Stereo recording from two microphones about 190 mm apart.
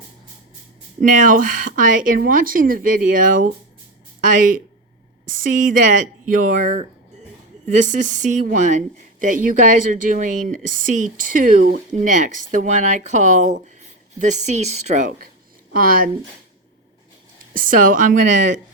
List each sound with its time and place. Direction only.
1.0 s speech: 45° right (ahead or behind)
15.7 s speech: 50° right (ahead or behind)
17.5 s speech: 45° right (ahead or behind)